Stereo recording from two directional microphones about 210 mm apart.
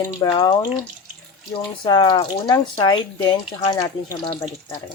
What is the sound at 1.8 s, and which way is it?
Speech, 20° left (ahead or behind).